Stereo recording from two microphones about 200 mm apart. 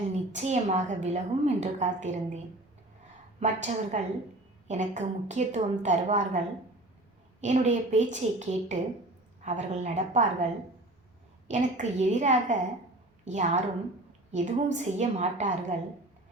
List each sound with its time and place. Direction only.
0.1 s a woman's voice: 35° right (ahead or behind)
3.4 s a woman's voice: 35° right (ahead or behind)
7.4 s a woman's voice: 35° right (ahead or behind)
11.4 s a woman's voice: 35° right (ahead or behind)